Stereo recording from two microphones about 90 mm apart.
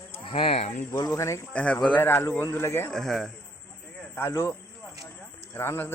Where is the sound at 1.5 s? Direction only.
15° left (ahead or behind).